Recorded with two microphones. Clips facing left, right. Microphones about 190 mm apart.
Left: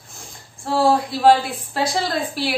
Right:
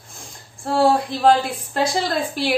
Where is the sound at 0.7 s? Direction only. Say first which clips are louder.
Even; 5° left (ahead or behind).